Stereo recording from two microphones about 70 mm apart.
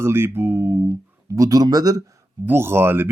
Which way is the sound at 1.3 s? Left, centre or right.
Right.